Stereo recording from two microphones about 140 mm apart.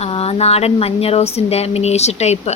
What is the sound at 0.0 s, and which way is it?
Speech, 45° left (ahead or behind).